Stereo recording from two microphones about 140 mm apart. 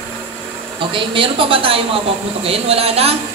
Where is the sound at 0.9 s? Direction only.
40° right (ahead or behind).